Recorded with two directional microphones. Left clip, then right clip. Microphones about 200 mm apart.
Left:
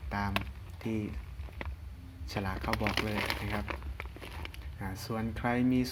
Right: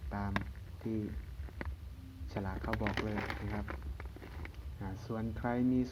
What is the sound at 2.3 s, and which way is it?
Speech, 40° left (ahead or behind).